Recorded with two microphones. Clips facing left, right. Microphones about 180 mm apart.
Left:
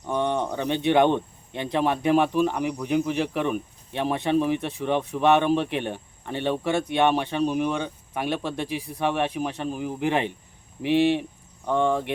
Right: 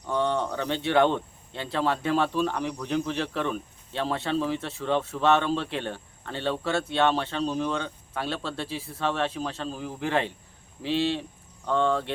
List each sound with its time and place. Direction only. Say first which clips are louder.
0.1 s speech: left 1 dB; 15° left (ahead or behind)